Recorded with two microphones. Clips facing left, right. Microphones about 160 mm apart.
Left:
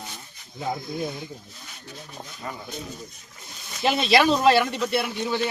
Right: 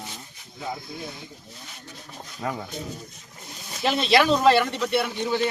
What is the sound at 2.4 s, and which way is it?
Speech, 75° right (ahead or behind).